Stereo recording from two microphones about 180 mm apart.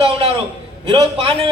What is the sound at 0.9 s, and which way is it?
Speech, 30° right (ahead or behind).